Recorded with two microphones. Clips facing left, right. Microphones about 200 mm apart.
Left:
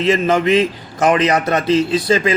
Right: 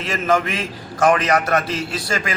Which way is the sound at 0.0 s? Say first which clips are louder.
Left 5 dB; 20° left (ahead or behind).